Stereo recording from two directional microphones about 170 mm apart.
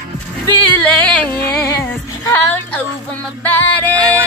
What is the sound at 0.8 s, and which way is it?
Speech, 5° left (ahead or behind).